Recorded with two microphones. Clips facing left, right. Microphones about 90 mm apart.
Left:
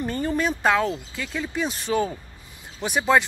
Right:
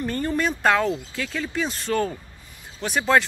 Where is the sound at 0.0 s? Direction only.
5° left (ahead or behind).